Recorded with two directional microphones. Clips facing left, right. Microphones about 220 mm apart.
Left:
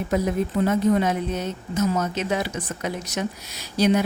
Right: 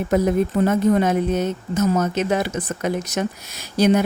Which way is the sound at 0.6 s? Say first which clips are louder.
Right 1 dB; 50° right (ahead or behind).